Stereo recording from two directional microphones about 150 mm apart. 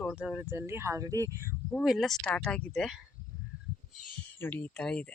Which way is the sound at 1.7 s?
Centre (ahead or behind).